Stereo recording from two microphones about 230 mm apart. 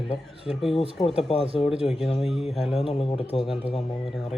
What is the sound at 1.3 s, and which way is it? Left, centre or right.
Speech, left.